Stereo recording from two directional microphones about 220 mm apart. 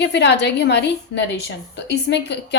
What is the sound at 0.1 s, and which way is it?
A woman's voice, 50° left (ahead or behind).